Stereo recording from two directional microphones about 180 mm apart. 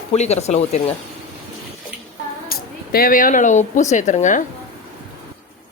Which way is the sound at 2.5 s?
55° left (ahead or behind).